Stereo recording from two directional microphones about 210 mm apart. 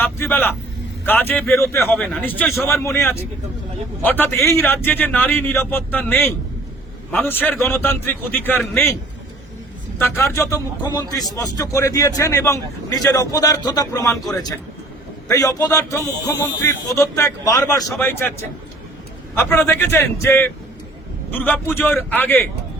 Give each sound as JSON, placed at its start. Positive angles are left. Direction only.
{"t": 0.0, "sound": "a man's voice", "side_deg": 10}
{"t": 10.0, "sound": "a man's voice", "side_deg": 15}